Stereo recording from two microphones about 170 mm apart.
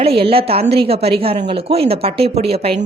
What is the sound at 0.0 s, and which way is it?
A woman's voice, 35° right (ahead or behind).